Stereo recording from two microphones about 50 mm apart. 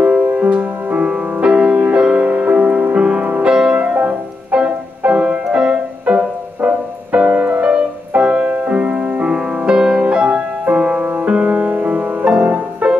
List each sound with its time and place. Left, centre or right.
0.0 s music: right
3.7 s music: right
9.3 s music: centre